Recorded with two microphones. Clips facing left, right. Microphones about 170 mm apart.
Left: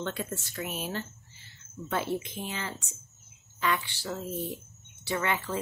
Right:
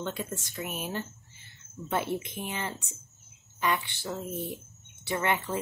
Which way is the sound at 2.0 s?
20° right (ahead or behind).